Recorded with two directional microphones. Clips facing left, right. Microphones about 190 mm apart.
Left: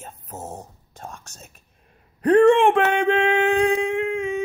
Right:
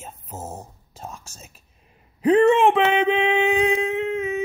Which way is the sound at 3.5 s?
5° right (ahead or behind).